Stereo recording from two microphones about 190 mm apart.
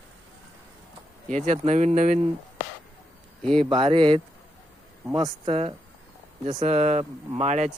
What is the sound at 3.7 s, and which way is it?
Speech, 30° right (ahead or behind).